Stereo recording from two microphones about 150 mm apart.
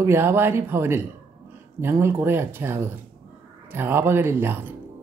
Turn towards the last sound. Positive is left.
turn(degrees=-15)  # may be behind; listen again after turning